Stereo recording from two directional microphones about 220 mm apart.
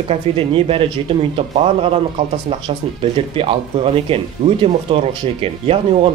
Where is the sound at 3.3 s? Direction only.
25° right (ahead or behind).